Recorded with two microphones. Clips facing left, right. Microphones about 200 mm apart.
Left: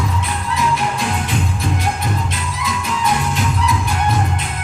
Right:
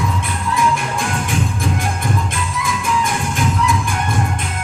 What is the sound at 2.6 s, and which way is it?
Music, 50° right (ahead or behind).